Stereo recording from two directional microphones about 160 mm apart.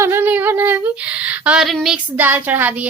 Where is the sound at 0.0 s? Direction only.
15° right (ahead or behind).